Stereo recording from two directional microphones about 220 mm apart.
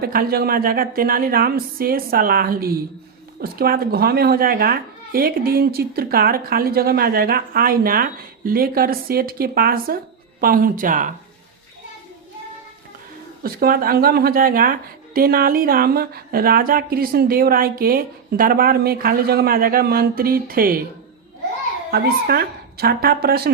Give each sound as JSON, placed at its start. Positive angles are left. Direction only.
{"t": 0.0, "sound": "a woman's voice", "side_deg": -45}
{"t": 13.4, "sound": "a woman's voice", "side_deg": -40}
{"t": 21.9, "sound": "a woman's voice", "side_deg": -45}